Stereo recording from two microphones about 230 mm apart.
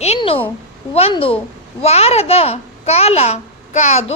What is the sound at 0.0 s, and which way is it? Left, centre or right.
A woman's voice, left.